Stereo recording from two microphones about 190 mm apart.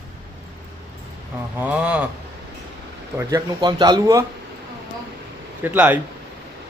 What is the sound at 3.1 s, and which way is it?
Speech, 20° right (ahead or behind).